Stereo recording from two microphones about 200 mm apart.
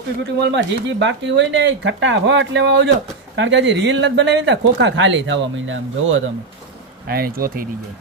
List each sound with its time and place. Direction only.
0.4 s speech: 60° right (ahead or behind)
7.1 s speech: 50° right (ahead or behind)